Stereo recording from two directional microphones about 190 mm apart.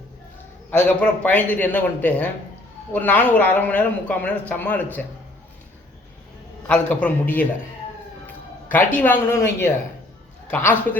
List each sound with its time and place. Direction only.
0.7 s speech: 5° left (ahead or behind)
6.7 s speech: 10° left (ahead or behind)
8.7 s speech: 10° left (ahead or behind)